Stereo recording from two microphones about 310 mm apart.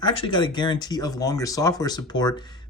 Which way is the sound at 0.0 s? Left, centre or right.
Centre.